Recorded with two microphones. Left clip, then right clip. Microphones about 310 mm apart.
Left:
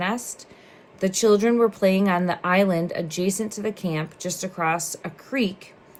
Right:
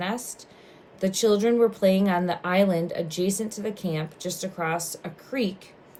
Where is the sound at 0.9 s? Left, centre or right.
Left.